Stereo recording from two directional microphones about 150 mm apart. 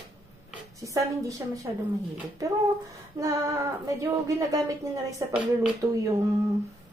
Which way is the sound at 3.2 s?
20° right (ahead or behind).